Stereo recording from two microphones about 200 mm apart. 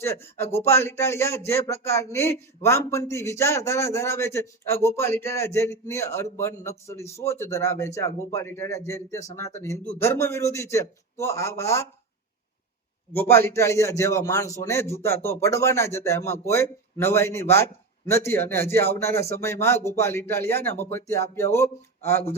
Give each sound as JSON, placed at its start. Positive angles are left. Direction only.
{"t": 0.0, "sound": "speech", "side_deg": 15}
{"t": 13.1, "sound": "speech", "side_deg": 10}